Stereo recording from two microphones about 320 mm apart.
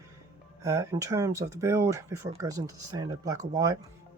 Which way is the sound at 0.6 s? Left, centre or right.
Centre.